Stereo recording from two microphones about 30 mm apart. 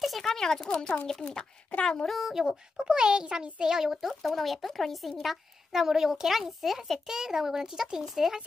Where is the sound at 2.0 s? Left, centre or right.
Centre.